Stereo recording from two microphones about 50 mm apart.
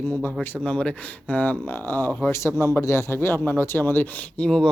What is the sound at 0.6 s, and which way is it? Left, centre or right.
Speech, left.